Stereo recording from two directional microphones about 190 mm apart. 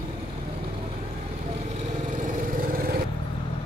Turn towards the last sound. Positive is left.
turn(degrees=-50)  # may be behind; listen again after turning